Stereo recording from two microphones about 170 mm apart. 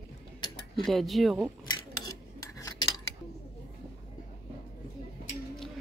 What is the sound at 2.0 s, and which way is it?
Cutlery, 20° left (ahead or behind).